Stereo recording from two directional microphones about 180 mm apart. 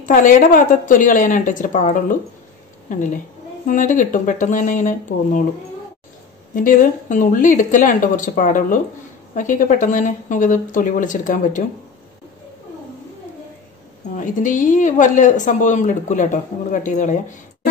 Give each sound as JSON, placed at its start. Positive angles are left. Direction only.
{"t": 0.1, "sound": "a woman's voice", "side_deg": 45}
{"t": 6.5, "sound": "speech", "side_deg": 50}
{"t": 14.1, "sound": "speech", "side_deg": 45}